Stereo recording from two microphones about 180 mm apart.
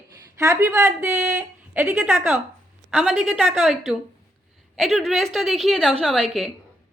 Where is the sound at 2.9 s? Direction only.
Centre (ahead or behind).